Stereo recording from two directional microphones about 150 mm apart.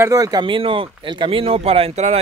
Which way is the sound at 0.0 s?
25° right (ahead or behind).